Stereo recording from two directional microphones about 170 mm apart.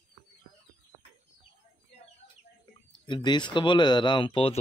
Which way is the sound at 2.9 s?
25° left (ahead or behind).